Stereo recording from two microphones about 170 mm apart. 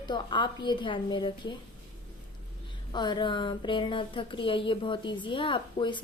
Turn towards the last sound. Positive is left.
turn(degrees=30)  # may be behind; listen again after turning